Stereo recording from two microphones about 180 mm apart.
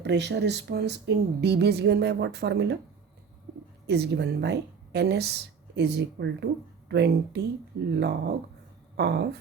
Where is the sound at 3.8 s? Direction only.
65° right (ahead or behind).